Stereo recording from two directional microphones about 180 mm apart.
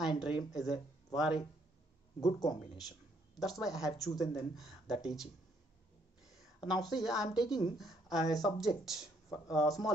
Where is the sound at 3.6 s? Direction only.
Centre (ahead or behind).